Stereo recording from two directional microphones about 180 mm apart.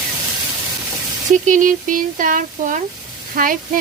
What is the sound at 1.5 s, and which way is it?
Speech, 45° right (ahead or behind).